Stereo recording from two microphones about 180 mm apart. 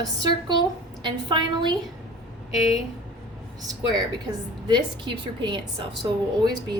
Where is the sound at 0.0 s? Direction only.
20° right (ahead or behind).